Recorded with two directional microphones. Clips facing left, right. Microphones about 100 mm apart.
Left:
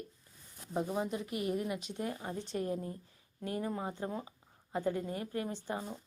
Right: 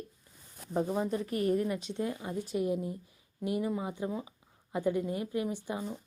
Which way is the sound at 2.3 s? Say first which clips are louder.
Right 5 dB; 10° right (ahead or behind).